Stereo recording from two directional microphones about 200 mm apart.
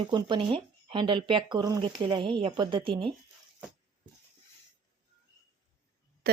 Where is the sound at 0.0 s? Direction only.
20° right (ahead or behind).